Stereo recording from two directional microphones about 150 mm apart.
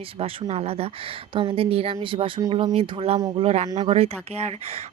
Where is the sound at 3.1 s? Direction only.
25° right (ahead or behind).